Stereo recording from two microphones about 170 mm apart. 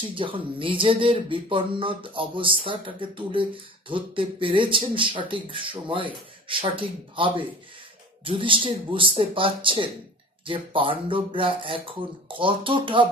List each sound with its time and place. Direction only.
0.0 s speech: 30° right (ahead or behind)